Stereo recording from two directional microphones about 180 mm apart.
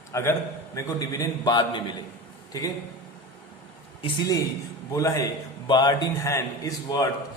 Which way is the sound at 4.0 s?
20° left (ahead or behind).